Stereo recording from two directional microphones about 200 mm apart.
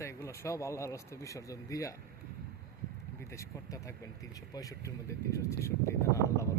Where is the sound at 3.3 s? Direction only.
15° left (ahead or behind).